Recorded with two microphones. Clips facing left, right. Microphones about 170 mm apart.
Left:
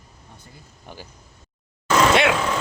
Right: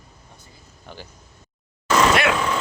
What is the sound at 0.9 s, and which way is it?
Speech, 15° left (ahead or behind).